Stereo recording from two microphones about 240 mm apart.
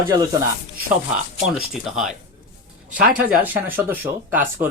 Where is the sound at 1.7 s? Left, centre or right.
Centre.